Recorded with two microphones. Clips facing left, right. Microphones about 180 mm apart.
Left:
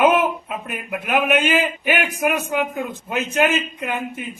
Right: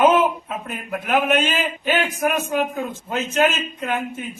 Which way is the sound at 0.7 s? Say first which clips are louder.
Right 1 dB; 15° left (ahead or behind).